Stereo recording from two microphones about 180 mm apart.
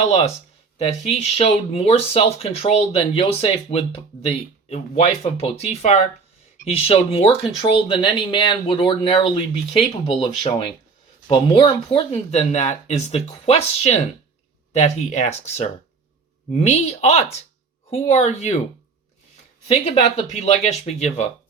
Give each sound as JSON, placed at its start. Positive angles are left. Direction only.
{"t": 0.8, "sound": "speech", "side_deg": 35}
{"t": 12.1, "sound": "speech", "side_deg": 40}
{"t": 19.6, "sound": "speech", "side_deg": 35}